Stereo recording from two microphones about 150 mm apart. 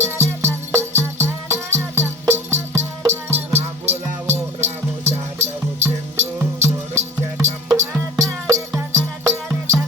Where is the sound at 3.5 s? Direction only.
45° right (ahead or behind).